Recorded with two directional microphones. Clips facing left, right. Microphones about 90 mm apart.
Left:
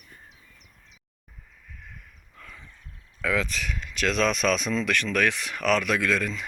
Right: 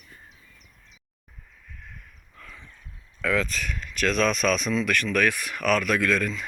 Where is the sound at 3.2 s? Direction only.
10° left (ahead or behind).